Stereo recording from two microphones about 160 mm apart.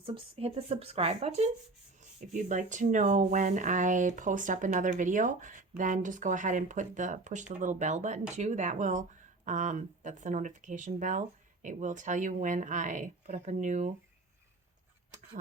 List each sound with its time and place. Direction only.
0.0 s speech: 35° right (ahead or behind); by 13.9 s 50° right (ahead or behind)